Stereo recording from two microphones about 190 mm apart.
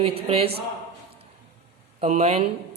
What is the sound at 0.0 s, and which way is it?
Speech, 30° right (ahead or behind).